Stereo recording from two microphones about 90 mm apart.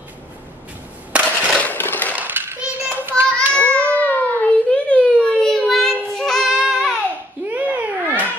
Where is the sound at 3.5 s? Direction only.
15° left (ahead or behind).